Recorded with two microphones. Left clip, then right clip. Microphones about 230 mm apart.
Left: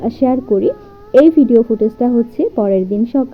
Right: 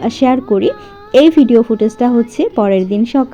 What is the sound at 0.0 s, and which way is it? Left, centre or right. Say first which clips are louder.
A woman's voice: right 2 dB; right.